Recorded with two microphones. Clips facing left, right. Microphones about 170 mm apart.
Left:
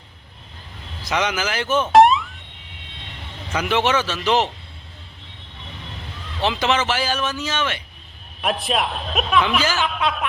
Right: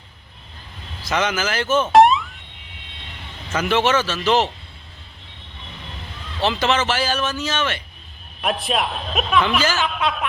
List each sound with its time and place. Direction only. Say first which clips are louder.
1.0 s speech: right 1 dB; 10° left (ahead or behind)
1.9 s a sound: even; centre (ahead or behind)
3.5 s speech: right 1 dB; 15° left (ahead or behind)
6.4 s speech: right 1 dB; 15° left (ahead or behind)
8.4 s a man's voice: even; centre (ahead or behind)